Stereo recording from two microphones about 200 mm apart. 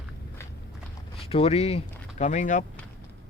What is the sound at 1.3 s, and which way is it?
Speech, 30° left (ahead or behind).